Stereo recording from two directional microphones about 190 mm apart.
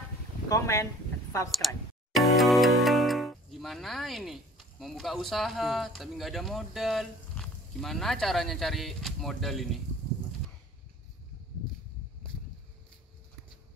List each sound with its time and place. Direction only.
0.5 s speech: 15° left (ahead or behind)
1.6 s speech: centre (ahead or behind)